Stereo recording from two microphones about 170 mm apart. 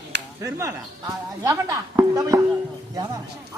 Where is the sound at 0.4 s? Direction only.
20° right (ahead or behind).